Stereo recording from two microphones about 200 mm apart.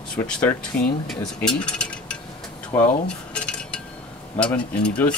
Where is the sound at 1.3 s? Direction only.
5° left (ahead or behind).